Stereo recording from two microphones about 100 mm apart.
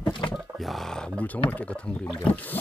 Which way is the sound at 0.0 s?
50° left (ahead or behind).